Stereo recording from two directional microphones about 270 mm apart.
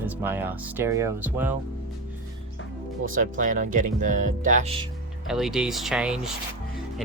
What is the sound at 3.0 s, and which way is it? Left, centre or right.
Speech, right.